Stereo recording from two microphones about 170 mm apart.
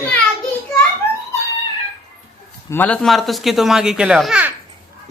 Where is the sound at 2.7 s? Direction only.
10° left (ahead or behind).